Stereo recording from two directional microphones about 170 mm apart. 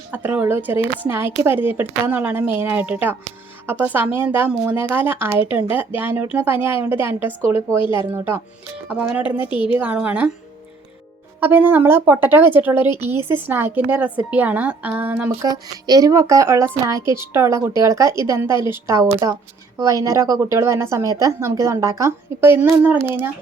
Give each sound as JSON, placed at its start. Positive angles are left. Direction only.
{"t": 0.1, "sound": "a woman's voice", "side_deg": -10}
{"t": 11.3, "sound": "a woman's voice", "side_deg": -10}